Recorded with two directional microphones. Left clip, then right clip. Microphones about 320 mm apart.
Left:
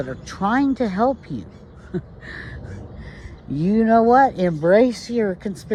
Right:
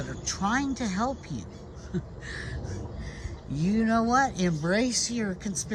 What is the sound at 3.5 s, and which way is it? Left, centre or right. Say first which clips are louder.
Speech: left 9 dB; left.